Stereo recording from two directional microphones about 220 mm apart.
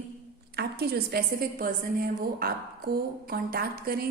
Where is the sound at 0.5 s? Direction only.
45° right (ahead or behind).